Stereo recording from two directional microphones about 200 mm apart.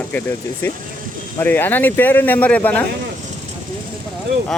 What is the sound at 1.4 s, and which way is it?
Speech, 10° left (ahead or behind).